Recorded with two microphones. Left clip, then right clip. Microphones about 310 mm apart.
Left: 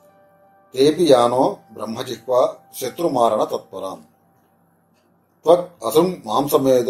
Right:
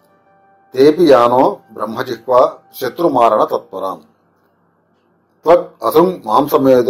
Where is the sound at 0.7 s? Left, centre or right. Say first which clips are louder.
Right 5 dB; centre.